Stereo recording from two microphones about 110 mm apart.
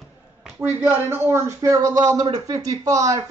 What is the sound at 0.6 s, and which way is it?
Speech, 15° right (ahead or behind).